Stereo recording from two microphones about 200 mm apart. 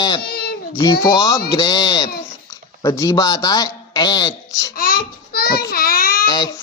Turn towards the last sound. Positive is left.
turn(degrees=20)  # may be behind; listen again after turning